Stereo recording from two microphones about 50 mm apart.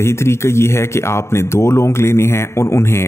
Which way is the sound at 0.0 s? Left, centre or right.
Left.